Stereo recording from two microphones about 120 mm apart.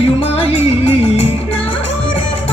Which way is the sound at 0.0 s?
55° left (ahead or behind).